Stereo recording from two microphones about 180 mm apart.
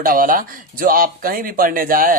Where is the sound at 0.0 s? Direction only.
50° right (ahead or behind).